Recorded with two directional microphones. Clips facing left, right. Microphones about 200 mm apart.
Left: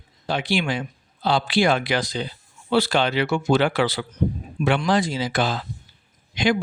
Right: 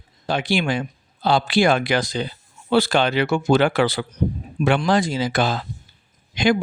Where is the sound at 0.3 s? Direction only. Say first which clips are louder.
Right 2 dB; 45° right (ahead or behind).